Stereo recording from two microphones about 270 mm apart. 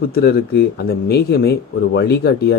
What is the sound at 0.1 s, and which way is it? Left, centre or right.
Speech, left.